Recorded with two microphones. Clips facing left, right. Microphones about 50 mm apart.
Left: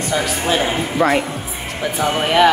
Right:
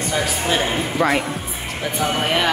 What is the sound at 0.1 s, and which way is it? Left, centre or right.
A woman's voice, centre.